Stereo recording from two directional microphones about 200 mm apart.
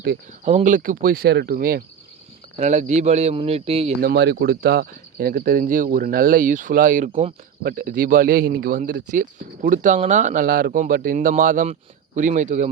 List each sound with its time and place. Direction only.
0.4 s speech: 35° right (ahead or behind)
4.0 s speech: 55° right (ahead or behind); by 7.1 s 40° right (ahead or behind)
7.1 s speech: 30° right (ahead or behind)
7.6 s speech: 45° right (ahead or behind)